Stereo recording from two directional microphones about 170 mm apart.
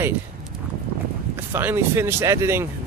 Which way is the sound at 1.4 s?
10° right (ahead or behind).